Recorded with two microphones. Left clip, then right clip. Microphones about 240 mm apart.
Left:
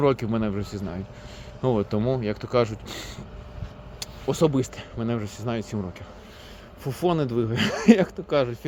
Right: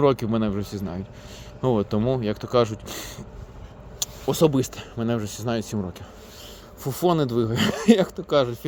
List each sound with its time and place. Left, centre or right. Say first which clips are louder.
0.0 s speech: right 2 dB; centre
0.6 s a man's voice: right 1 dB; right
1.6 s speech: right 1 dB; centre
4.3 s speech: right 2 dB; right
6.8 s speech: right 3 dB; right